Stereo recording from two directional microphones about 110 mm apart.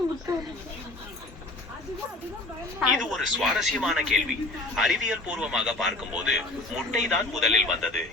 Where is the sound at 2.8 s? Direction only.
5° right (ahead or behind).